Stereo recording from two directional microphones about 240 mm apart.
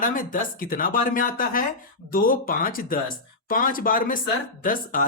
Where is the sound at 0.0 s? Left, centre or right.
Left.